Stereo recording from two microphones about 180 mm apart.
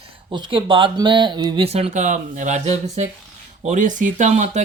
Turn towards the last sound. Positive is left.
turn(degrees=-40)  # may be behind; listen again after turning